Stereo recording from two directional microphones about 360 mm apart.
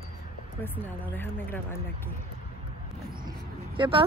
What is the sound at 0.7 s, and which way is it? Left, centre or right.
A woman's voice, centre.